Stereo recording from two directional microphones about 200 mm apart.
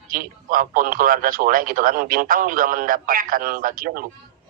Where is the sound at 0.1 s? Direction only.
45° right (ahead or behind).